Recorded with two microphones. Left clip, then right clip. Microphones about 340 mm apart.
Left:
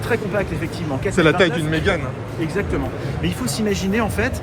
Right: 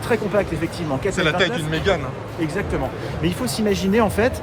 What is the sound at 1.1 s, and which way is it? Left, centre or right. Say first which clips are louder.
Speech: left 5 dB; centre.